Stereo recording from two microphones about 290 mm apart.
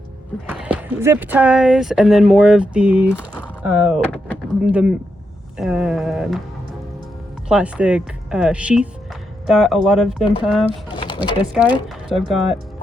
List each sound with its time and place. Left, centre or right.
0.4 s speech: centre
7.4 s speech: centre
11.0 s a sound: centre
12.0 s speech: centre